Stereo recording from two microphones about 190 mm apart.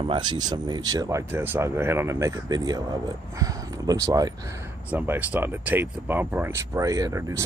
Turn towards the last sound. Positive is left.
turn(degrees=-15)  # may be behind; listen again after turning